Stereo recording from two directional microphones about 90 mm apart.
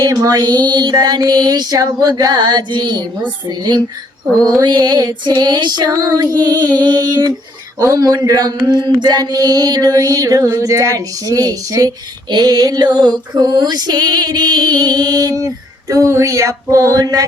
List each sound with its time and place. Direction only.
0.0 s female singing: 45° right (ahead or behind)